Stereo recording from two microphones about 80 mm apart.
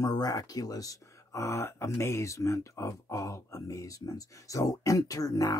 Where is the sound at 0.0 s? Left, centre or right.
Left.